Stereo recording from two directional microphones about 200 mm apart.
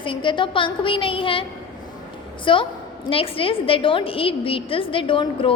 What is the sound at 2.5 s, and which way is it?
A woman's voice, 25° left (ahead or behind).